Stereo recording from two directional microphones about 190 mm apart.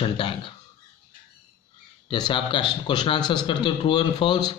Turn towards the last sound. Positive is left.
turn(degrees=25)  # may be behind; listen again after turning